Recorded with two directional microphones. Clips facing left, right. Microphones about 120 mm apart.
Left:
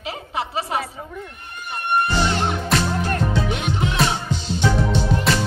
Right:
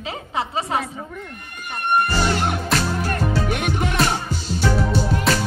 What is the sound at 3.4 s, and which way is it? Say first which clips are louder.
Music: right 1 dB; 55° right (ahead or behind).